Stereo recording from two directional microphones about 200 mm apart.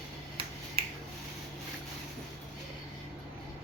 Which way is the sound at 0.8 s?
30° right (ahead or behind).